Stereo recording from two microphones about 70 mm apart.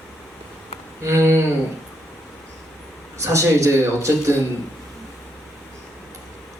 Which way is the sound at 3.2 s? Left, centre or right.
Right.